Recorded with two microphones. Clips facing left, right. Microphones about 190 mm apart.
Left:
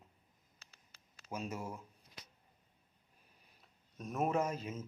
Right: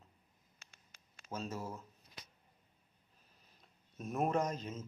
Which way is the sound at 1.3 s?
15° left (ahead or behind).